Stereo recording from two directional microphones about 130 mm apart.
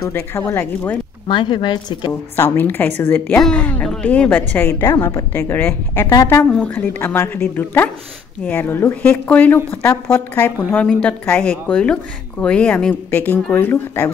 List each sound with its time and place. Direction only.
0.1 s a woman's voice: 15° left (ahead or behind)
1.2 s a woman's voice: 40° left (ahead or behind)
2.3 s a woman's voice: 15° left (ahead or behind)